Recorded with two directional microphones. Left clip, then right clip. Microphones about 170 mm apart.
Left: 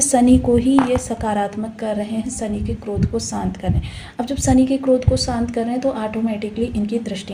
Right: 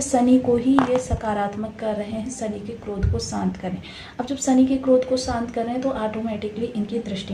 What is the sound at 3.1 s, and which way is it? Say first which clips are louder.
A woman's voice: left 3 dB; 40° left (ahead or behind).